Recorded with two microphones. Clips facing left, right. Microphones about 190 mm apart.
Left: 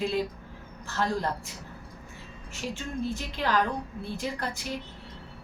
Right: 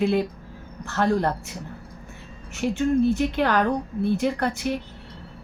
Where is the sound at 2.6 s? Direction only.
60° right (ahead or behind).